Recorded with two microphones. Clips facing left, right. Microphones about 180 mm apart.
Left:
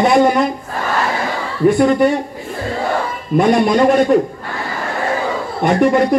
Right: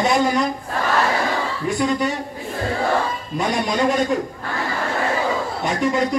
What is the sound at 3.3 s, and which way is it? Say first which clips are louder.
Speech: left 9 dB; 60° left (ahead or behind).